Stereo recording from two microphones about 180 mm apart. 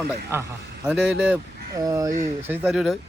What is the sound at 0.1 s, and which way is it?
Speech, 15° right (ahead or behind).